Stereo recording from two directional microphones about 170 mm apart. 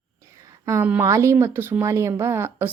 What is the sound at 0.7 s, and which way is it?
A woman's voice, 10° right (ahead or behind).